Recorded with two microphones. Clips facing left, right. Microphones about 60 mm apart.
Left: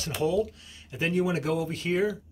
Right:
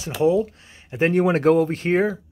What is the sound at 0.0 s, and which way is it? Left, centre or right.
Speech, right.